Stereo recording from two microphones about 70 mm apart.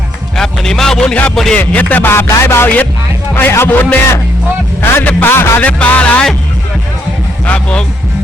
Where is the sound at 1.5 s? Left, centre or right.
Left.